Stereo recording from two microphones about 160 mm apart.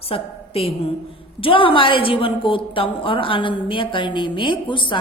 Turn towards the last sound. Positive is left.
turn(degrees=30)  # may be behind; listen again after turning